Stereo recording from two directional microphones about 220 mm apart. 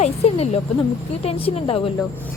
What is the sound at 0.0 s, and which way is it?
A woman's voice, 30° left (ahead or behind).